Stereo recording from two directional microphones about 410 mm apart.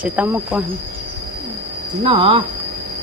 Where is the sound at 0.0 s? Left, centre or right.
Centre.